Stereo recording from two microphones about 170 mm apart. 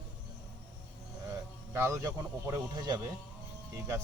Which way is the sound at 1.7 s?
15° right (ahead or behind).